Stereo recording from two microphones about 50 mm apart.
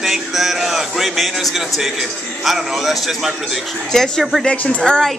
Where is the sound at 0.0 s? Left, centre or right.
Centre.